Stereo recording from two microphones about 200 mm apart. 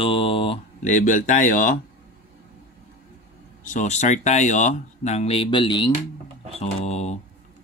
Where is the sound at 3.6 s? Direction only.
40° left (ahead or behind).